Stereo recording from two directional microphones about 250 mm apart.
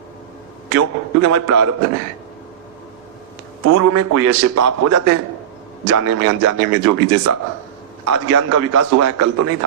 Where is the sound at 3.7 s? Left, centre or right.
Right.